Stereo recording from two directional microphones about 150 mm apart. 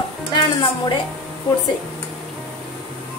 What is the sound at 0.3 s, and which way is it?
Speech, 30° left (ahead or behind).